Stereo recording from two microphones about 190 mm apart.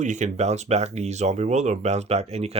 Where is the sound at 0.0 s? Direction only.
40° right (ahead or behind).